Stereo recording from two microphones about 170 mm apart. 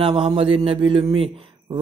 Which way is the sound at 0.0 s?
30° right (ahead or behind).